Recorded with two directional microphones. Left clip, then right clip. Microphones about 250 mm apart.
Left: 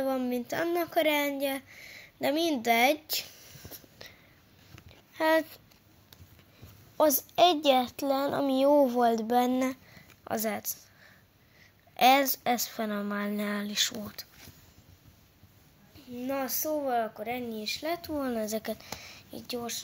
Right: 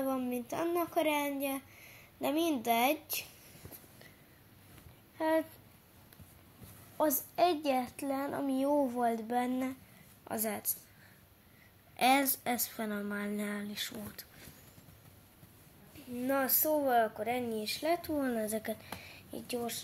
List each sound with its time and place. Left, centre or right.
0.0 s speech: left
5.1 s speech: left
7.0 s a woman's voice: left
10.2 s speech: left
12.0 s speech: left
16.2 s speech: centre